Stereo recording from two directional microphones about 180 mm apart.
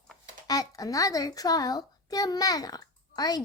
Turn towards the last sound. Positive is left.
turn(degrees=20)  # may be behind; listen again after turning